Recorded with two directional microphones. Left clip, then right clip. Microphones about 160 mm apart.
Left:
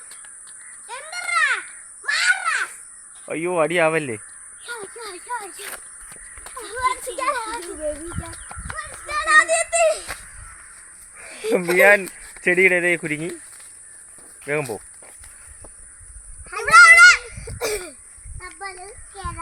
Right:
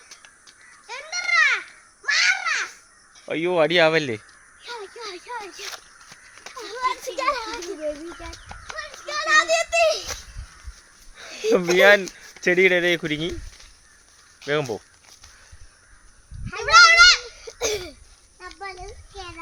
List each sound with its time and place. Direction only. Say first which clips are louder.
0.9 s a sound: right 3 dB; 5° left (ahead or behind)
3.2 s speech: right 1 dB; 10° right (ahead or behind)
4.6 s snake: left 1 dB; 10° right (ahead or behind)
6.6 s a sound: left 3 dB; 40° right (ahead or behind)
7.2 s a child's voice: left 1 dB; 50° right (ahead or behind)
8.6 s a sound: left 1 dB; 60° right (ahead or behind)
11.7 s speech: left 1 dB; 10° right (ahead or behind)
14.4 s speech: even; 10° right (ahead or behind)
16.6 s children playing: left 3 dB; 50° left (ahead or behind)
17.6 s throat clearing: even; centre (ahead or behind)